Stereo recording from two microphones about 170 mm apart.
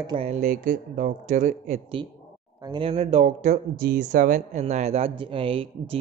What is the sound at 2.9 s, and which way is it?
A man's voice, 40° right (ahead or behind).